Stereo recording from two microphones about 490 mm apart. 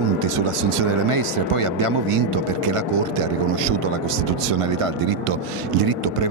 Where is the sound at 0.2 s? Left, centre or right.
Right.